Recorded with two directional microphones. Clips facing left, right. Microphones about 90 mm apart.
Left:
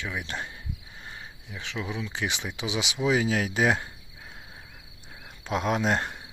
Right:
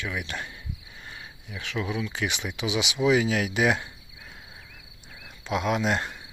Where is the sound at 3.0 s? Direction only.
30° left (ahead or behind).